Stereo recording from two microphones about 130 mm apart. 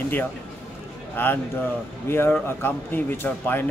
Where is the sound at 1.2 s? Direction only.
15° left (ahead or behind).